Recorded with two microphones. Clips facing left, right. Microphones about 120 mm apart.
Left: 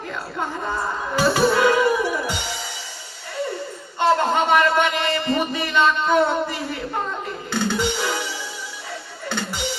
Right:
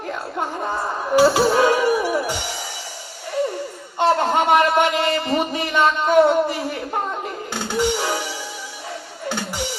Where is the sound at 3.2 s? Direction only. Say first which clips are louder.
Right 4 dB; 15° right (ahead or behind).